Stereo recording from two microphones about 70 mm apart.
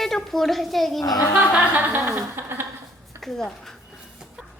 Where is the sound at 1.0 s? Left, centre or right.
Left.